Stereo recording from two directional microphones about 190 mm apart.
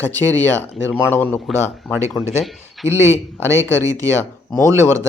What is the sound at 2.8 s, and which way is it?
Speech, 15° right (ahead or behind).